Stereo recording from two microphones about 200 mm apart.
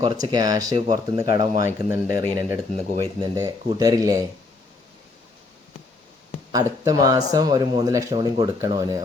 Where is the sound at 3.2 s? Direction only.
15° right (ahead or behind).